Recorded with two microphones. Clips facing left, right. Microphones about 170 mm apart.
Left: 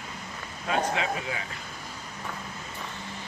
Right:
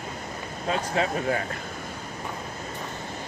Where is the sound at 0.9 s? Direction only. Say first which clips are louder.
Right 6 dB; 50° right (ahead or behind).